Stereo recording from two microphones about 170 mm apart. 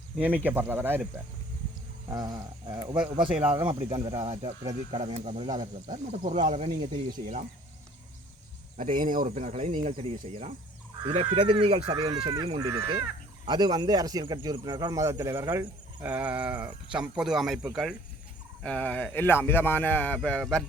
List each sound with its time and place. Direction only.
0.2 s speech: 10° right (ahead or behind)
2.0 s speech: 20° right (ahead or behind)
3.2 s speech: 5° right (ahead or behind)
3.5 s speech: 30° right (ahead or behind)
6.4 s speech: 45° right (ahead or behind)
8.8 s speech: 45° right (ahead or behind); by 12.7 s 25° right (ahead or behind)
12.7 s speech: 15° right (ahead or behind)
18.6 s speech: 5° left (ahead or behind)